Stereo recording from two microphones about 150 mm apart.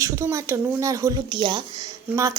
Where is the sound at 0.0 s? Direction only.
20° right (ahead or behind).